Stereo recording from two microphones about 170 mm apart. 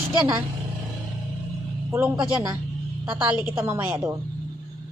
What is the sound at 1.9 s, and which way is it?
A woman's voice, 10° right (ahead or behind).